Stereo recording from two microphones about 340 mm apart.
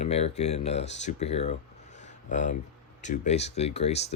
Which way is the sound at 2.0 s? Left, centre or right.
Left.